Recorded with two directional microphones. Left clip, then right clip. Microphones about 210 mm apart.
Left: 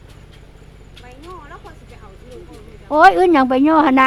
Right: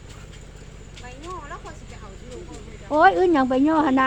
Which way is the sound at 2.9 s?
20° left (ahead or behind).